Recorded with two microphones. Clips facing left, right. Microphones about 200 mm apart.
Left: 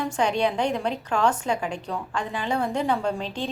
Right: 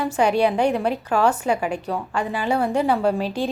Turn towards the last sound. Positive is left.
turn(degrees=-10)  # may be behind; listen again after turning